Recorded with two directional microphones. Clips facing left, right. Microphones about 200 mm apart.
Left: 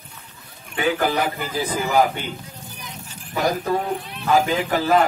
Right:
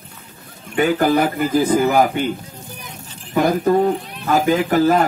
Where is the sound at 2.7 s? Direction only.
55° right (ahead or behind).